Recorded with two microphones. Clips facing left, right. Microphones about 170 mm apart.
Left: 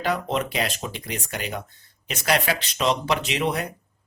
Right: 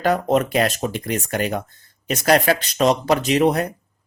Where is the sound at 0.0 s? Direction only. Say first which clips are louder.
Right 7 dB; 45° right (ahead or behind).